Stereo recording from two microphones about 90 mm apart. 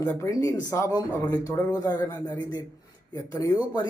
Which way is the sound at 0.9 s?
45° left (ahead or behind).